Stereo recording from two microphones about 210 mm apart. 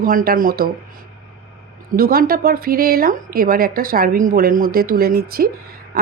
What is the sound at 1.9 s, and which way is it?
Speech, 45° right (ahead or behind).